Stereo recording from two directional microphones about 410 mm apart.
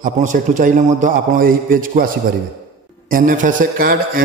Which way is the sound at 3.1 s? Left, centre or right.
Centre.